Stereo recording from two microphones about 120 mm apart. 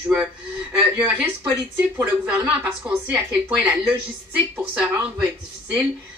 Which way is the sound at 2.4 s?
10° right (ahead or behind).